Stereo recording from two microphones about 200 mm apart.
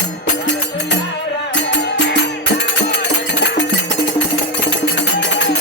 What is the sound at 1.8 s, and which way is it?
Music, 60° left (ahead or behind).